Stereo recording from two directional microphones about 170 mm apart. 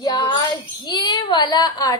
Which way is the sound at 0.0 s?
25° left (ahead or behind).